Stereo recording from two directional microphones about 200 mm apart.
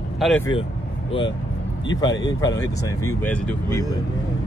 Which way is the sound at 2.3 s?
15° left (ahead or behind).